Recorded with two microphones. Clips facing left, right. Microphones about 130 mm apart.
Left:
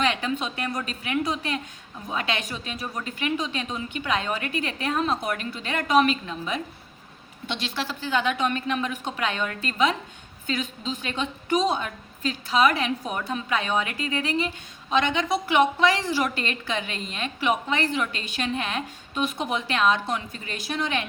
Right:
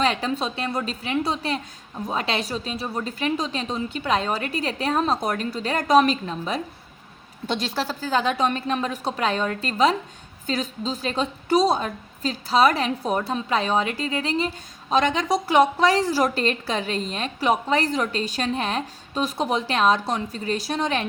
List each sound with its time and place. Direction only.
0.0 s a woman's voice: 35° right (ahead or behind)